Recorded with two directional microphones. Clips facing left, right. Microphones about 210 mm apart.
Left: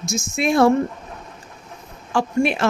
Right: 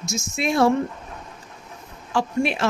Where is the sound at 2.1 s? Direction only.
50° left (ahead or behind).